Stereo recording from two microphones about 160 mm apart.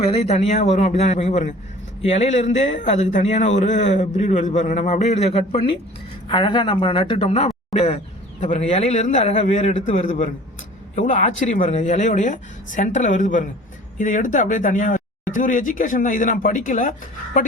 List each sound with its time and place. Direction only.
0.1 s speech: 40° left (ahead or behind)
6.2 s speech: 30° left (ahead or behind); by 16.9 s 55° left (ahead or behind)